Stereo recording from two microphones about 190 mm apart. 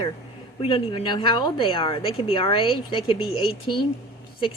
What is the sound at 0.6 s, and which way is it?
Speech, 30° left (ahead or behind).